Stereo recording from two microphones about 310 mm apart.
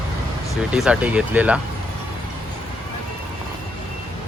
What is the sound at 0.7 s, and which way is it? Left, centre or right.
Speech, centre.